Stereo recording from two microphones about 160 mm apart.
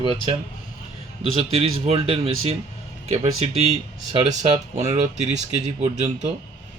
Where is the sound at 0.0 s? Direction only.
35° right (ahead or behind).